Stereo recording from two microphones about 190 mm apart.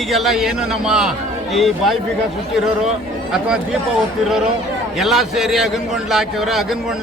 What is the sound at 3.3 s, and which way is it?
Speech, 5° right (ahead or behind).